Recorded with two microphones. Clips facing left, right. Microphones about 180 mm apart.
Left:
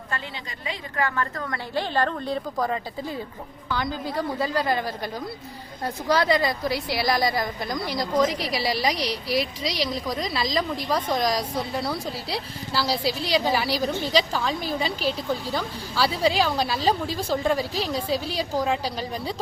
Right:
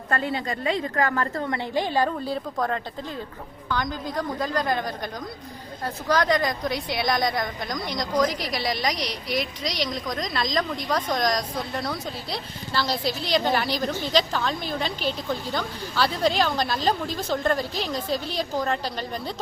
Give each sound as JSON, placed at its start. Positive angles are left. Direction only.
{"t": 0.1, "sound": "a woman's voice", "side_deg": -50}
{"t": 8.9, "sound": "speech", "side_deg": 30}
{"t": 9.3, "sound": "a woman's voice", "side_deg": 5}